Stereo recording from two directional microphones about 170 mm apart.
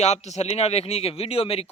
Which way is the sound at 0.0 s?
40° left (ahead or behind).